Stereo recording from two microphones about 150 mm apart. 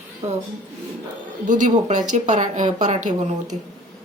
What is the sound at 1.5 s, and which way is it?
Speech, 55° right (ahead or behind).